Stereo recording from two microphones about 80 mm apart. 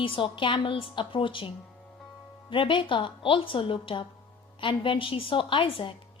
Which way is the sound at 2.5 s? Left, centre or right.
Left.